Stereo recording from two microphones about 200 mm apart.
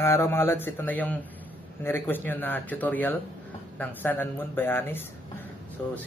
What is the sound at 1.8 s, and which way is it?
Speech, 10° left (ahead or behind).